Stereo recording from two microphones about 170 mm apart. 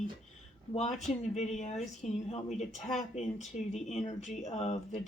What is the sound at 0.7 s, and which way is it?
A woman's voice, 40° left (ahead or behind).